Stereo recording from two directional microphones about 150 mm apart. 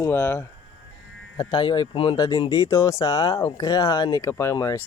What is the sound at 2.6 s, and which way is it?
Speech, 20° left (ahead or behind).